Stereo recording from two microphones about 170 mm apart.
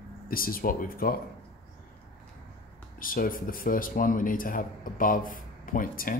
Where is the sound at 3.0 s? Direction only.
55° left (ahead or behind).